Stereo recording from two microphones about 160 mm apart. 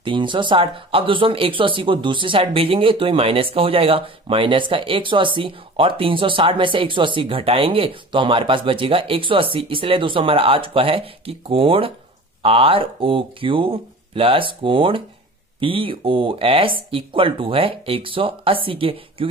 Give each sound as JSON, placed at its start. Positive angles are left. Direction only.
{"t": 0.0, "sound": "speech", "side_deg": -30}